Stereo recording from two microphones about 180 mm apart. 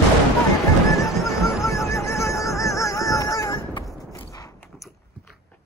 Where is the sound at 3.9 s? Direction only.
20° left (ahead or behind).